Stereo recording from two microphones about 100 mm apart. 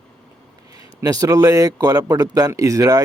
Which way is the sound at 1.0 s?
35° right (ahead or behind).